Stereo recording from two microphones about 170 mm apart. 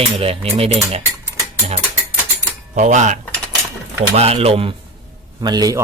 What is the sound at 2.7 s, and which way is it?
Speech, 45° right (ahead or behind).